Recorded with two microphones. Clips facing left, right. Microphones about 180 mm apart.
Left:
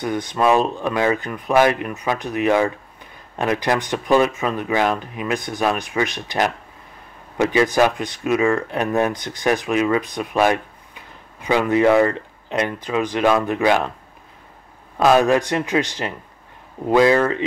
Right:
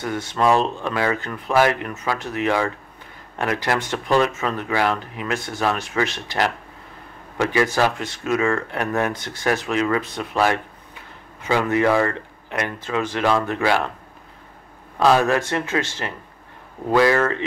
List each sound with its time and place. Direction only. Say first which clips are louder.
0.0 s speech: left 2 dB; 15° left (ahead or behind)
15.0 s speech: left 2 dB; 20° left (ahead or behind)